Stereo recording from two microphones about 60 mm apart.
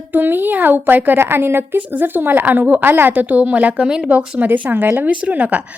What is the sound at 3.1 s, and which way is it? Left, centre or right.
A woman's voice, right.